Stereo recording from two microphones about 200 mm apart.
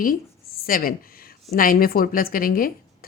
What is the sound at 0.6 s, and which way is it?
A woman's voice, 45° left (ahead or behind).